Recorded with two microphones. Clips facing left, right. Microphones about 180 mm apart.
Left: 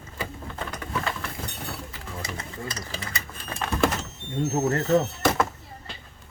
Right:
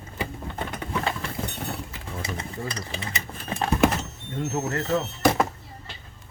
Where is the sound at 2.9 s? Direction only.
20° right (ahead or behind).